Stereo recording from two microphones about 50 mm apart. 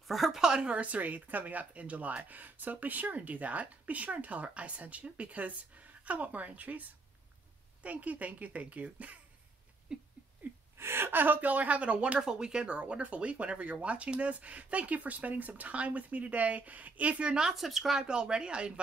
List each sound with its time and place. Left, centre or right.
0.1 s speech: centre
0.4 s a woman's voice: centre; by 6.8 s right
7.8 s a woman's voice: right
9.9 s a sound: centre
10.8 s a woman's voice: right; by 18.0 s centre
18.0 s speech: centre